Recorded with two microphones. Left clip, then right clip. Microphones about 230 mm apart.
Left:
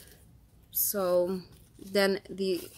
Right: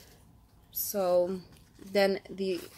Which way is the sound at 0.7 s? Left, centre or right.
Centre.